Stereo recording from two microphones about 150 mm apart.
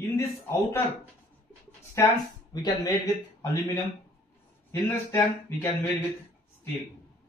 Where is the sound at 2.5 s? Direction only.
25° left (ahead or behind).